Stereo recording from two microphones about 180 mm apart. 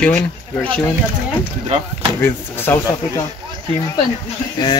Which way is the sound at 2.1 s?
10° left (ahead or behind).